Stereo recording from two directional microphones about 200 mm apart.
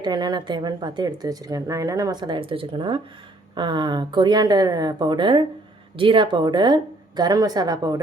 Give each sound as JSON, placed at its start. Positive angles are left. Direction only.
{"t": 0.0, "sound": "a woman's voice", "side_deg": -20}